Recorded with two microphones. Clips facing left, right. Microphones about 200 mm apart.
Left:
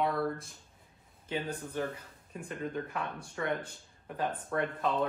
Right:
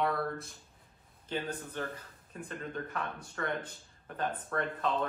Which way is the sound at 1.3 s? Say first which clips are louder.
Left 1 dB; 20° left (ahead or behind).